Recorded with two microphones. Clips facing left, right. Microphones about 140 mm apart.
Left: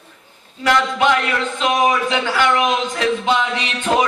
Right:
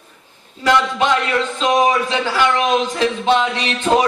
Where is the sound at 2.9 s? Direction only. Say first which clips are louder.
Right 2 dB; 30° right (ahead or behind).